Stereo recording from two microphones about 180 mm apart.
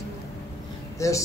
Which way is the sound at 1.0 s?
15° left (ahead or behind).